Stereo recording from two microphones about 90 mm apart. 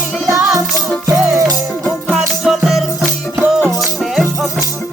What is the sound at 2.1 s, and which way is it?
Music, 5° right (ahead or behind).